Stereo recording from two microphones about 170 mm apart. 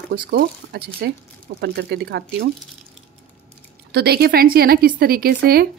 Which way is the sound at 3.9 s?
70° right (ahead or behind).